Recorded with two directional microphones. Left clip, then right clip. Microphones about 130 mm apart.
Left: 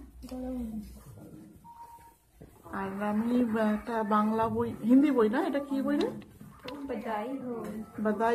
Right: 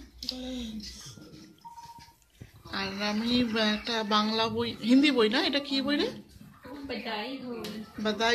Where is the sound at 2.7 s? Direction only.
25° right (ahead or behind).